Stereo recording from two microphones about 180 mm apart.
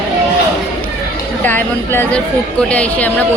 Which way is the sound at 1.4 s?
10° left (ahead or behind).